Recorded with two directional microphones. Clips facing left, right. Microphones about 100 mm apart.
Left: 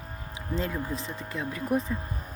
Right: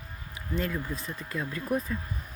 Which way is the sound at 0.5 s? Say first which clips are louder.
Left 1 dB; 30° left (ahead or behind).